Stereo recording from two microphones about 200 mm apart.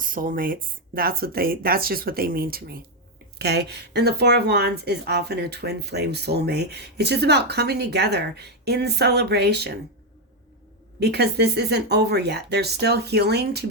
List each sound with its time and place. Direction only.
0.0 s speech: 45° right (ahead or behind)
11.0 s speech: 55° right (ahead or behind)